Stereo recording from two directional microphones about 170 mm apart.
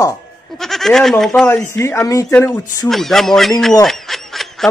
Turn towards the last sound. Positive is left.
turn(degrees=0)  # may be behind; listen again after turning